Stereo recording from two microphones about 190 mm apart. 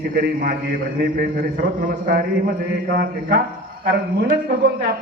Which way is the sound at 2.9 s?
50° right (ahead or behind).